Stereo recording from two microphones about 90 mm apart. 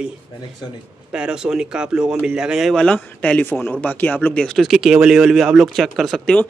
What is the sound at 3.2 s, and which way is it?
Speech, 15° left (ahead or behind).